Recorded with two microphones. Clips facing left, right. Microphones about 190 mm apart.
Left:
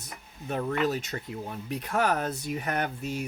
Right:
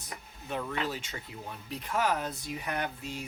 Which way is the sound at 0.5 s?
50° left (ahead or behind).